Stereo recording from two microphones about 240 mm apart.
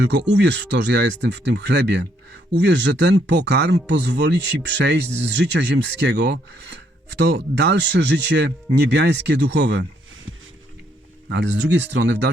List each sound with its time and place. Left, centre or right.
0.0 s speech: right
11.3 s speech: right